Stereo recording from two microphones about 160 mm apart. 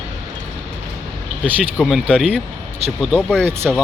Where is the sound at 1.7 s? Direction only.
Centre (ahead or behind).